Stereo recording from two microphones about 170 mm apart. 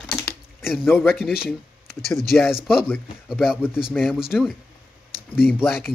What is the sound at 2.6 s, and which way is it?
Speech, 5° right (ahead or behind).